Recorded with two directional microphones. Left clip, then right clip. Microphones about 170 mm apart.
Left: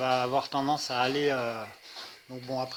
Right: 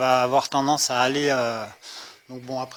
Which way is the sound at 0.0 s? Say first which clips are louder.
Right 8 dB; 50° right (ahead or behind).